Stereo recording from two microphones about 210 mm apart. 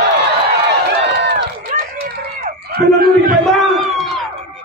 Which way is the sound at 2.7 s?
45° right (ahead or behind).